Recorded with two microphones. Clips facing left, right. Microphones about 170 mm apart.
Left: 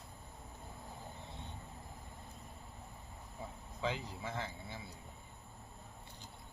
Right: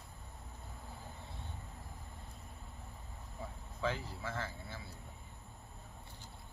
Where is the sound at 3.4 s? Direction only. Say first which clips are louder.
Right 1 dB; 20° left (ahead or behind).